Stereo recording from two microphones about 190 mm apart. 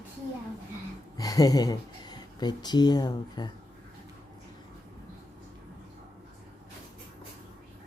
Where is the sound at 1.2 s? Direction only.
20° left (ahead or behind).